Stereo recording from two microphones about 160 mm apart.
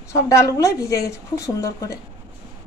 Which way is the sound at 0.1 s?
20° left (ahead or behind).